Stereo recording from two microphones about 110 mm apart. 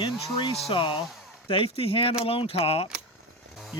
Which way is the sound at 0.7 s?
50° left (ahead or behind).